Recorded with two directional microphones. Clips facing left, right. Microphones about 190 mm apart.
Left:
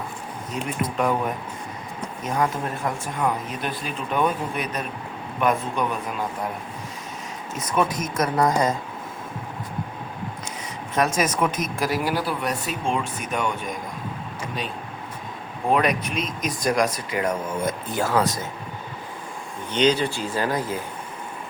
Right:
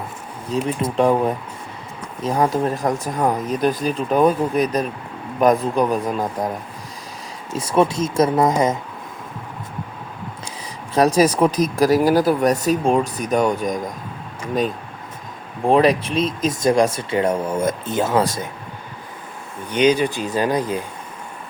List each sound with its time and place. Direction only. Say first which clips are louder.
0.5 s speech: right 7 dB; 30° right (ahead or behind)
7.5 s speech: right 6 dB; 30° right (ahead or behind)
10.9 s speech: right 7 dB; 35° right (ahead or behind)
15.6 s speech: right 6 dB; 30° right (ahead or behind)
19.7 s speech: right 4 dB; 10° right (ahead or behind)